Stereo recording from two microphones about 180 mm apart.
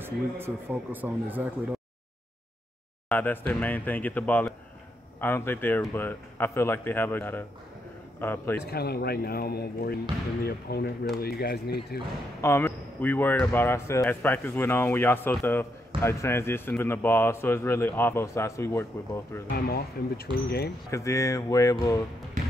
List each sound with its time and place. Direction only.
0.0 s speech: 10° right (ahead or behind)
3.1 s speech: 10° left (ahead or behind)
8.5 s speech: 60° left (ahead or behind)
12.4 s speech: 15° left (ahead or behind)
19.5 s speech: 60° left (ahead or behind)
20.9 s speech: 15° left (ahead or behind)